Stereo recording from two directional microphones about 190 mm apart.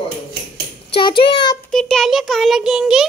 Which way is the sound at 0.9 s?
25° left (ahead or behind).